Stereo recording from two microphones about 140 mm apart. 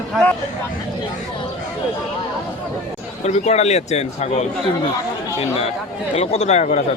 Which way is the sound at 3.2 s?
50° left (ahead or behind).